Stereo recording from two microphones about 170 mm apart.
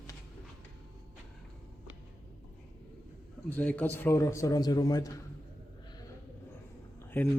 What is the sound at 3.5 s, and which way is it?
A man's voice, 10° left (ahead or behind).